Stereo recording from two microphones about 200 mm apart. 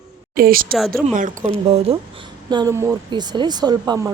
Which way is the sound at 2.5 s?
20° right (ahead or behind).